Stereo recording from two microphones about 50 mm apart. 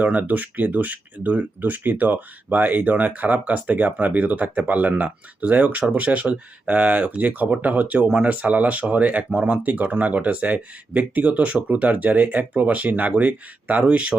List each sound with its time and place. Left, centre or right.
0.0 s speech: right